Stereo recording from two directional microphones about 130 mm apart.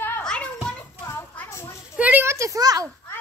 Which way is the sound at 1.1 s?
20° left (ahead or behind).